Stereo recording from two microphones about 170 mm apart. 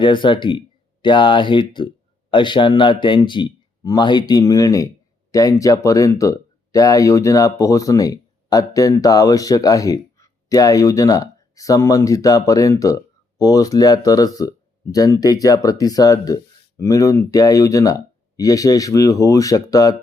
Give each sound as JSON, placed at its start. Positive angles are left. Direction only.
{"t": 0.0, "sound": "speech", "side_deg": 30}